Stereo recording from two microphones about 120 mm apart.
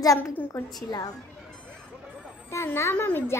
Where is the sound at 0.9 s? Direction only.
35° left (ahead or behind).